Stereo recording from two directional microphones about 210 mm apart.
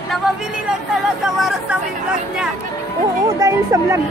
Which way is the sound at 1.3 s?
Centre (ahead or behind).